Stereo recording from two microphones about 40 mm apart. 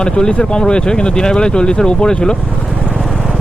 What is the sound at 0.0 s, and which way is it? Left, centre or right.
Speech, left.